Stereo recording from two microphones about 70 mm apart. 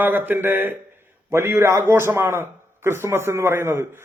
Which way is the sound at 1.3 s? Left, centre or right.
Right.